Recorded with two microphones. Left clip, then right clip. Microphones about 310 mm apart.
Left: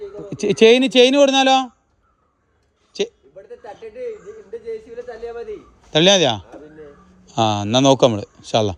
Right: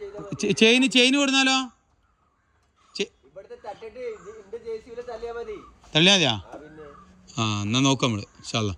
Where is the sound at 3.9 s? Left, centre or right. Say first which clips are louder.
Left 5 dB; centre.